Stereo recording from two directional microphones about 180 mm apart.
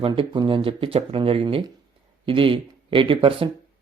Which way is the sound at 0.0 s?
25° right (ahead or behind).